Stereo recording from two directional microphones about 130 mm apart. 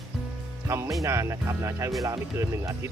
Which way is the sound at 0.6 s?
20° right (ahead or behind).